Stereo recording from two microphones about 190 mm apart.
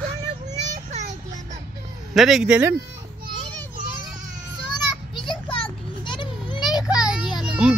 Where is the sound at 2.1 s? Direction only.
Centre (ahead or behind).